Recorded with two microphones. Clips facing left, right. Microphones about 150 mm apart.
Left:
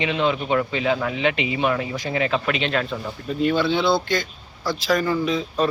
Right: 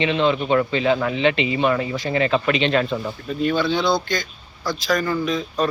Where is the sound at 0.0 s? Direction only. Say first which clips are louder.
Right 3 dB; 5° left (ahead or behind).